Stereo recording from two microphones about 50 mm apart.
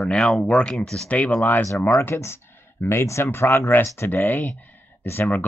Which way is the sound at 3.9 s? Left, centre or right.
Left.